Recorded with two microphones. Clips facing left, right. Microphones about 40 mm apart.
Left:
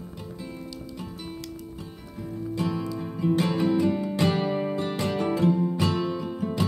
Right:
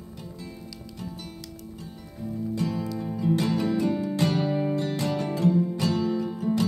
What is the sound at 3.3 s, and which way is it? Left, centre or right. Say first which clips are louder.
Music: left 2 dB; left.